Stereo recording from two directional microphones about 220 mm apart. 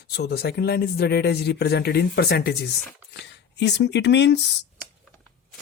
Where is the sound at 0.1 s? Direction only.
45° left (ahead or behind).